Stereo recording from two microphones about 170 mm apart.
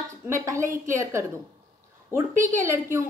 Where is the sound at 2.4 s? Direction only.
20° right (ahead or behind).